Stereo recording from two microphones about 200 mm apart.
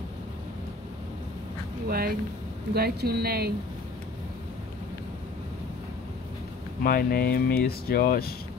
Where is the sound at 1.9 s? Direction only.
50° right (ahead or behind).